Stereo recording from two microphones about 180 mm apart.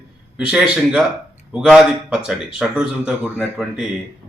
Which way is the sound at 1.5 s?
5° right (ahead or behind).